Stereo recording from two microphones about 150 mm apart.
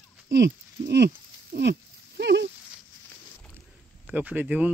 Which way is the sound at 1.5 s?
90° right.